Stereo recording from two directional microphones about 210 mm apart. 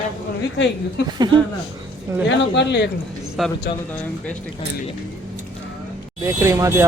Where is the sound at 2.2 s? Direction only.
55° left (ahead or behind).